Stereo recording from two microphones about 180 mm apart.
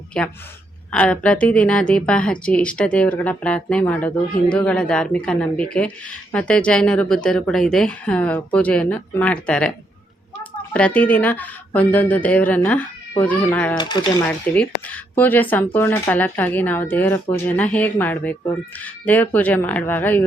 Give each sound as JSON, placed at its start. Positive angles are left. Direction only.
{"t": 0.9, "sound": "a woman's voice", "side_deg": 5}
{"t": 10.8, "sound": "a woman's voice", "side_deg": 5}
{"t": 13.7, "sound": "speech", "side_deg": 25}
{"t": 14.3, "sound": "a woman's voice", "side_deg": 5}